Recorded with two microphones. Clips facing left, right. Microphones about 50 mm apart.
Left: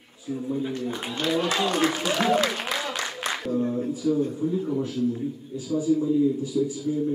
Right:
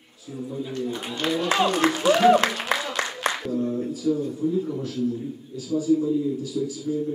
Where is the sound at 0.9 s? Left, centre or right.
Centre.